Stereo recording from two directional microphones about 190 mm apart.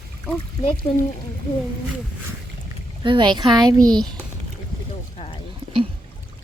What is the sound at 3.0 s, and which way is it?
Speech, 25° right (ahead or behind).